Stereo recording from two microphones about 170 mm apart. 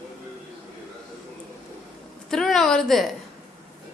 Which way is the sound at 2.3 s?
5° left (ahead or behind).